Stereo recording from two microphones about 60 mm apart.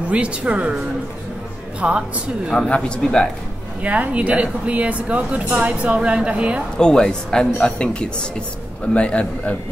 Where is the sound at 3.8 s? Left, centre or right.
Right.